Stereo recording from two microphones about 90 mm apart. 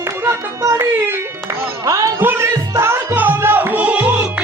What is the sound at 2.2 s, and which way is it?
Music, 25° right (ahead or behind).